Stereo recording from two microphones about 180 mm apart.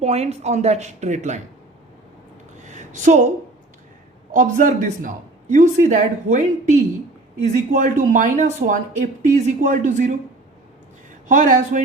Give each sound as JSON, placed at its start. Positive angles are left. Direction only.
{"t": 0.0, "sound": "speech", "side_deg": -35}
{"t": 2.6, "sound": "a sound", "side_deg": -40}
{"t": 4.3, "sound": "speech", "side_deg": -45}
{"t": 11.3, "sound": "speech", "side_deg": -45}